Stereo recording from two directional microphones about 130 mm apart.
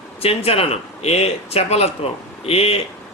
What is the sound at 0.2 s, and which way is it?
A man's voice, 50° left (ahead or behind).